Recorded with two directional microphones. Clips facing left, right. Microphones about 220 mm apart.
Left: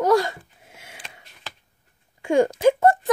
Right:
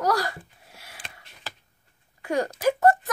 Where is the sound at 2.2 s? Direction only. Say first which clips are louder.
Left 6 dB; 25° left (ahead or behind).